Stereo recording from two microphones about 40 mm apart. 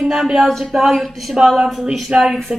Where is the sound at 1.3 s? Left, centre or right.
Centre.